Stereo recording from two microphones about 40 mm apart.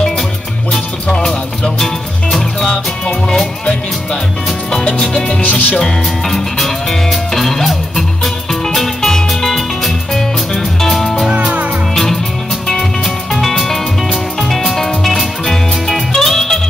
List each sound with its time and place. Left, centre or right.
1.0 s music: centre
5.4 s music: left
5.8 s music: centre